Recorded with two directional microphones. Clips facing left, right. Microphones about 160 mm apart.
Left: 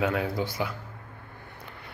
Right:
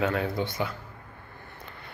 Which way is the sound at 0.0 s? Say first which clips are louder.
Even; 10° left (ahead or behind).